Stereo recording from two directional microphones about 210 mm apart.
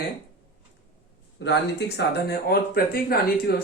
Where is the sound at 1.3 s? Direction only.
55° left (ahead or behind).